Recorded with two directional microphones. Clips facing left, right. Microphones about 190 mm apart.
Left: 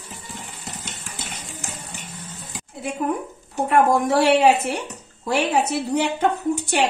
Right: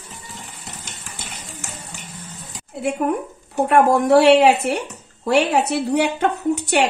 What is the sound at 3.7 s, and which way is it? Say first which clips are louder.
A woman's voice: right 3 dB; 65° right (ahead or behind).